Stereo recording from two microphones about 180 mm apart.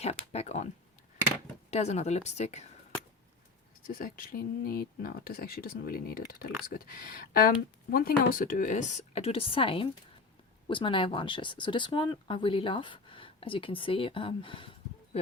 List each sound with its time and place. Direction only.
0.0 s speech: 35° left (ahead or behind)
1.7 s speech: 40° left (ahead or behind)
3.8 s speech: 50° left (ahead or behind); by 15.2 s 30° left (ahead or behind)